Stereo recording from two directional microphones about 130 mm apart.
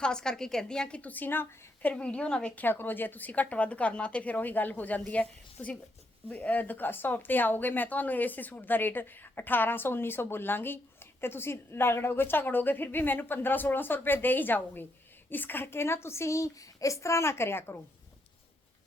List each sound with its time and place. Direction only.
0.0 s a woman's voice: 5° left (ahead or behind)